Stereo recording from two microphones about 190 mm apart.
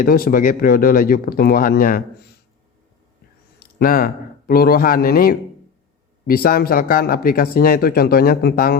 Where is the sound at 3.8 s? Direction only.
50° left (ahead or behind).